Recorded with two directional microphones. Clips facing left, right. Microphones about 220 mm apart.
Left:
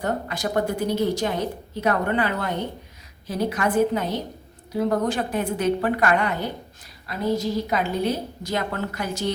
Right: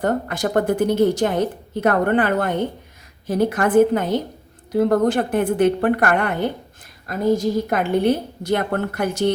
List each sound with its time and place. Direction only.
0.0 s a woman's voice: 50° right (ahead or behind)